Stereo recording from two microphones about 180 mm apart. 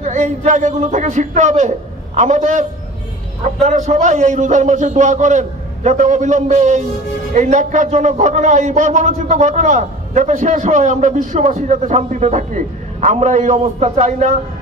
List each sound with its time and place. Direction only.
0.0 s a man's voice: 40° right (ahead or behind)